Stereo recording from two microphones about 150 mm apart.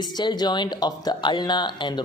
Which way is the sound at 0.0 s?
30° left (ahead or behind).